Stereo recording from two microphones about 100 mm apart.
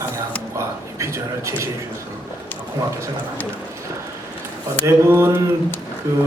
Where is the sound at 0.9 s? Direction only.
30° right (ahead or behind).